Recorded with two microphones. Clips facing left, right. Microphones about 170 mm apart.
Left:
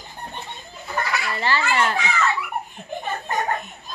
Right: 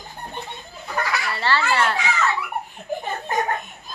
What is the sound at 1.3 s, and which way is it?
Speech, 15° left (ahead or behind).